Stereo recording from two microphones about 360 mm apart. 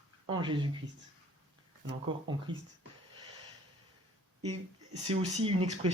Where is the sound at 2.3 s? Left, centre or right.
Centre.